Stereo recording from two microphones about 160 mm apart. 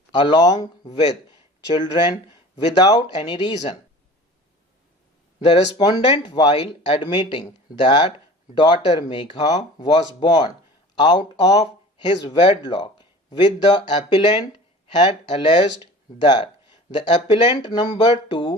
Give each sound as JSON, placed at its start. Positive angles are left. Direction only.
{"t": 0.1, "sound": "speech", "side_deg": 30}
{"t": 1.7, "sound": "speech", "side_deg": 30}
{"t": 5.5, "sound": "speech", "side_deg": 35}
{"t": 5.8, "sound": "speech", "side_deg": 25}